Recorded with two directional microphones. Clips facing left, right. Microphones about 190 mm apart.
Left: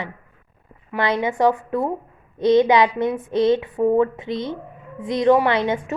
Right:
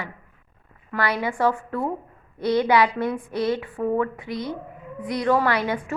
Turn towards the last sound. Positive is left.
turn(degrees=20)  # may be behind; listen again after turning